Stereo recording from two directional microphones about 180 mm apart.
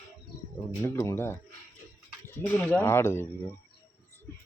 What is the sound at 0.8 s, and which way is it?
Speech, 15° left (ahead or behind).